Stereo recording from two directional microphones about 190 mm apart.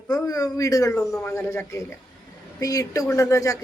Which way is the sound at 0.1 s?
20° left (ahead or behind).